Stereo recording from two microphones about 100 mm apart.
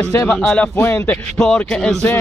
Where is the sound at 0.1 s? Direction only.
25° left (ahead or behind); by 2.0 s 5° left (ahead or behind).